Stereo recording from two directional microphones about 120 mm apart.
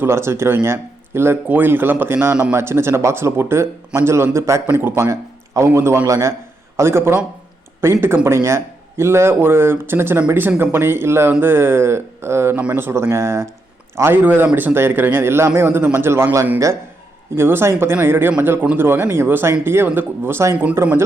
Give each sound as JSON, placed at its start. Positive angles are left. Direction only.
{"t": 0.0, "sound": "speech", "side_deg": -20}